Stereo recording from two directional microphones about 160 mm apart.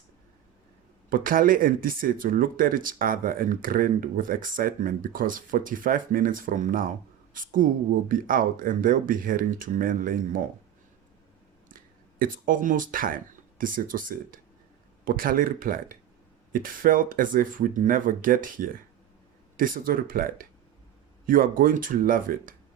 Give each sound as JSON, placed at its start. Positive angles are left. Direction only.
{"t": 1.1, "sound": "speech", "side_deg": -60}
{"t": 12.2, "sound": "speech", "side_deg": -60}